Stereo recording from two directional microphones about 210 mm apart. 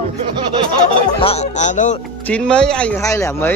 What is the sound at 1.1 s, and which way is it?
Speech, 30° left (ahead or behind).